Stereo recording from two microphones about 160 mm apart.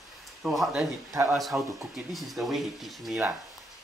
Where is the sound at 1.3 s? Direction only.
Centre (ahead or behind).